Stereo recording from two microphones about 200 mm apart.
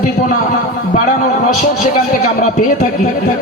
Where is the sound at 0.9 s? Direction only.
40° left (ahead or behind).